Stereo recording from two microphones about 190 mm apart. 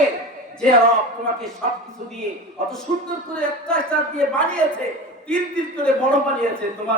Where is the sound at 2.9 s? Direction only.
40° right (ahead or behind).